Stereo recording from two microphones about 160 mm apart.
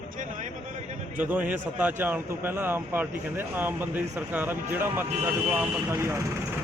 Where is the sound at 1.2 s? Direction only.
10° right (ahead or behind).